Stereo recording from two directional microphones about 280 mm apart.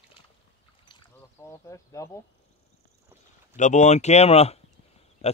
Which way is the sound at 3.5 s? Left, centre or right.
Left.